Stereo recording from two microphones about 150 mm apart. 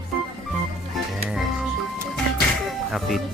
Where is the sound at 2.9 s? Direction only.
Centre (ahead or behind).